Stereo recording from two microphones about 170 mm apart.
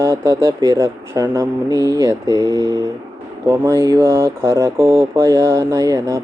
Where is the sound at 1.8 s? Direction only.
20° right (ahead or behind).